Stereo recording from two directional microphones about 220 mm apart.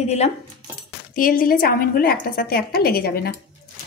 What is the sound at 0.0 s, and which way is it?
A woman's voice, 30° left (ahead or behind).